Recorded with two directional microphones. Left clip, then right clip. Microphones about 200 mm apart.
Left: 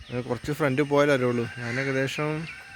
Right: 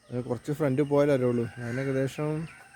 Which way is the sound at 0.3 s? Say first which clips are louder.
Left 2 dB; centre (ahead or behind).